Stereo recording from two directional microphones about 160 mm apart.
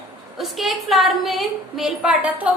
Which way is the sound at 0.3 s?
Centre (ahead or behind).